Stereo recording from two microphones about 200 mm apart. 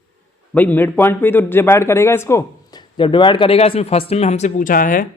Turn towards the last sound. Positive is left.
turn(degrees=45)  # may be behind; listen again after turning